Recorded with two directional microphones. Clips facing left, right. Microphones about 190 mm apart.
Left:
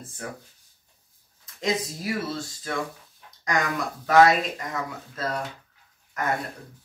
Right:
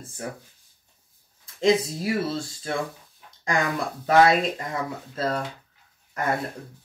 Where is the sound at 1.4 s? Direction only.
30° right (ahead or behind).